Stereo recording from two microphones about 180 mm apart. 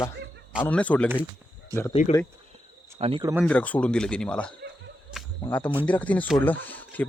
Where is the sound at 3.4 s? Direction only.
10° left (ahead or behind).